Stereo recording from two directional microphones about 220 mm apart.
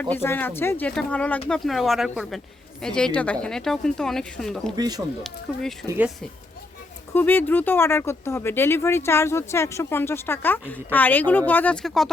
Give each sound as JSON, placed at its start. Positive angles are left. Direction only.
{"t": 0.0, "sound": "speech", "side_deg": 10}
{"t": 4.8, "sound": "speech", "side_deg": -15}
{"t": 5.5, "sound": "speech", "side_deg": 0}
{"t": 7.1, "sound": "speech", "side_deg": 10}